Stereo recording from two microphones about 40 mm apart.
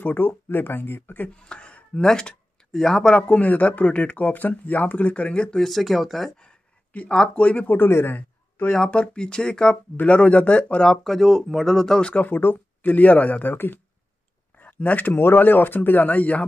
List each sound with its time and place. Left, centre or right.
0.0 s speech: left
1.5 s speech: left
3.2 s speech: left
5.6 s speech: centre
6.9 s speech: left
7.6 s a man's voice: left
8.7 s speech: left
10.0 s speech: left
10.9 s speech: centre
12.0 s speech: left
12.3 s speech: left
12.8 s speech: left
14.6 s speech: left
15.3 s speech: left